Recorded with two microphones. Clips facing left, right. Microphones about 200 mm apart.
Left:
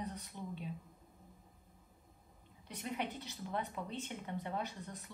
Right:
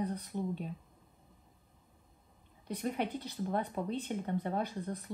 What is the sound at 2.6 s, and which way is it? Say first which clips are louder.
Speech: right 6 dB; 45° right (ahead or behind).